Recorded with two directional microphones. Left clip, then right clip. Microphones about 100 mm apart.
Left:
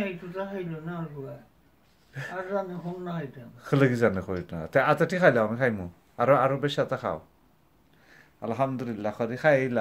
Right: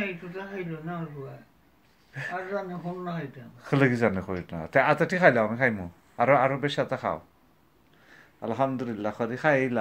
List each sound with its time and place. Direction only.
0.0 s a man's voice: 25° left (ahead or behind)
2.1 s a man's voice: 25° left (ahead or behind)